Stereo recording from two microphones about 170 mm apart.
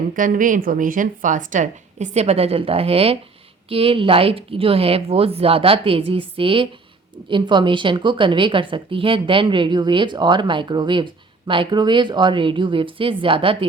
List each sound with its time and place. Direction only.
0.1 s a woman's voice: 50° right (ahead or behind); by 13.7 s 30° right (ahead or behind)